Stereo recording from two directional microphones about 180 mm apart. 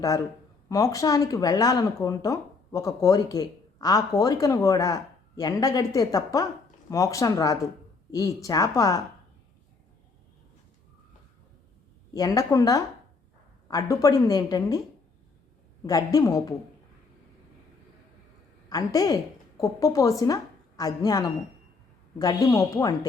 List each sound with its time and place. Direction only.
0.7 s a woman's voice: 20° left (ahead or behind)
12.1 s a woman's voice: 20° left (ahead or behind)
15.8 s a woman's voice: 20° left (ahead or behind)
18.7 s a woman's voice: 20° left (ahead or behind)